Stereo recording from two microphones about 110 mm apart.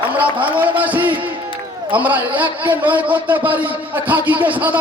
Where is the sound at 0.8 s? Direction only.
15° right (ahead or behind).